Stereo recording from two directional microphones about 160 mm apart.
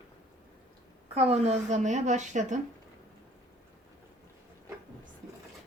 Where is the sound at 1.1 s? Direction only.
40° right (ahead or behind).